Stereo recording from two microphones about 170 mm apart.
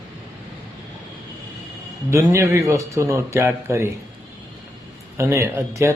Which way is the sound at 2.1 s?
15° right (ahead or behind).